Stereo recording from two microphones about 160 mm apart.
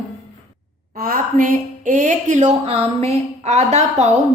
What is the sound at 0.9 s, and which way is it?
A woman's voice, 60° right (ahead or behind).